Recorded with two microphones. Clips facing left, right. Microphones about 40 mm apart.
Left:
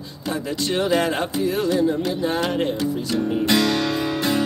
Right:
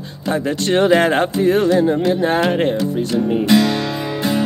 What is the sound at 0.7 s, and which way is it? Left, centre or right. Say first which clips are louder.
Speech: right 7 dB; right.